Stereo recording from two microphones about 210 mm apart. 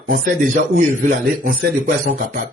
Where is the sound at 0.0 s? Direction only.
40° right (ahead or behind).